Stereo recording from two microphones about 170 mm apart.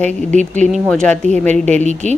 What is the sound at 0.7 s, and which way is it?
Speech, 5° left (ahead or behind).